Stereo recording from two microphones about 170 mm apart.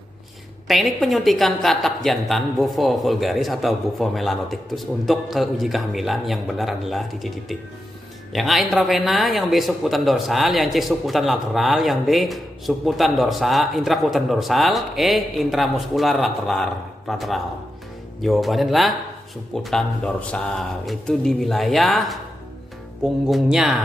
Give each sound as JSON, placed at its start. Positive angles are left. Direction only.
{"t": 0.7, "sound": "speech", "side_deg": 0}
{"t": 23.2, "sound": "speech", "side_deg": -5}